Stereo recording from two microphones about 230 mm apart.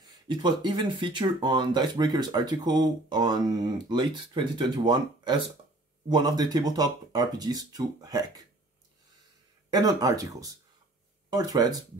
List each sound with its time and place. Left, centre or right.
0.0 s speech: centre
9.7 s speech: centre